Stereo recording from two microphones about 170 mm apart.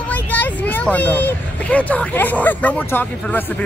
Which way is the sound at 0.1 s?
10° left (ahead or behind).